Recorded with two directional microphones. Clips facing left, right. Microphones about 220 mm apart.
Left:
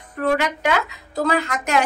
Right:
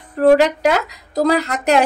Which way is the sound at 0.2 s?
35° right (ahead or behind).